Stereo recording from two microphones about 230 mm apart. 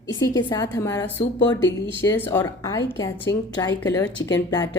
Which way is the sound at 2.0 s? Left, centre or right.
Centre.